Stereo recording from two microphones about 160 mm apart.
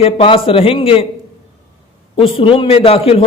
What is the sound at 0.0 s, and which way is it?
A man's voice, 35° left (ahead or behind).